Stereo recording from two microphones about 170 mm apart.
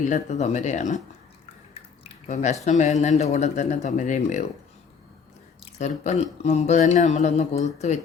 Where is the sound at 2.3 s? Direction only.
45° left (ahead or behind).